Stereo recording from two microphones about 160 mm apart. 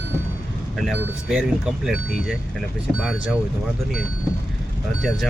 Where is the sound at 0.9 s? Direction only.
5° right (ahead or behind).